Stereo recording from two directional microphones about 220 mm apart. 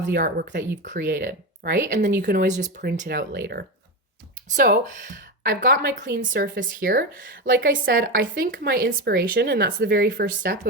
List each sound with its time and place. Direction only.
0.1 s speech: 45° right (ahead or behind)